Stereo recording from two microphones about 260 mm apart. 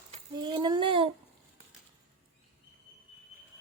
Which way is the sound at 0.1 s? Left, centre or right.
Centre.